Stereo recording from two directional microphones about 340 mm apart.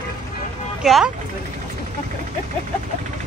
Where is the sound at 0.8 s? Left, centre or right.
Centre.